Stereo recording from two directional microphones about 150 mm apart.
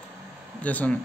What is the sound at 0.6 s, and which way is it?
Speech, 10° left (ahead or behind).